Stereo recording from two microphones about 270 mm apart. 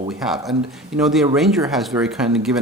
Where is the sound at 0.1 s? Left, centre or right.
Centre.